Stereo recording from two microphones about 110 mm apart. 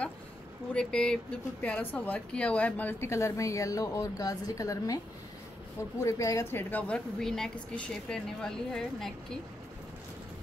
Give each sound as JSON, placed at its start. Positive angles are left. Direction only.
{"t": 0.7, "sound": "speech", "side_deg": 5}